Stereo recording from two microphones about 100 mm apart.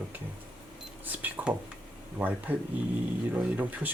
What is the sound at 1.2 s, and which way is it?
Speech, 15° right (ahead or behind).